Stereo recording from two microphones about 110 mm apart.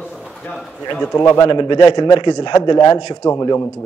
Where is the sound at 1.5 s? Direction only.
45° left (ahead or behind).